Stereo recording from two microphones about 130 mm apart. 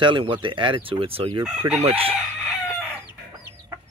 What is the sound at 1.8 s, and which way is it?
Speech, 50° right (ahead or behind).